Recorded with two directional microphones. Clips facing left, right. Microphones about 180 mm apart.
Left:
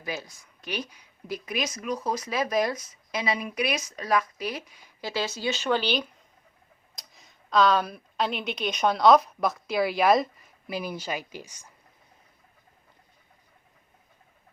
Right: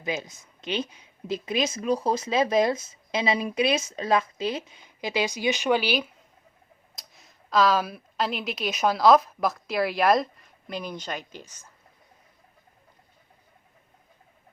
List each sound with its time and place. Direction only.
0.0 s a woman's voice: 20° right (ahead or behind); by 11.7 s 10° left (ahead or behind)